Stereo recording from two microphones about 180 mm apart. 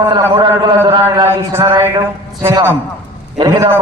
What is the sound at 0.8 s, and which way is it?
Chant, 20° right (ahead or behind).